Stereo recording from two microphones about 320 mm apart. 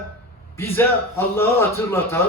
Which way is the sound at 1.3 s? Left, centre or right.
Centre.